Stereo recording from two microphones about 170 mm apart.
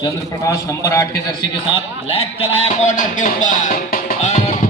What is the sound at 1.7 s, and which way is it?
Speech, 35° left (ahead or behind).